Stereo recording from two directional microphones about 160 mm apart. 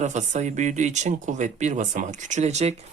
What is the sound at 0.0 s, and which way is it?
Speech, 45° right (ahead or behind).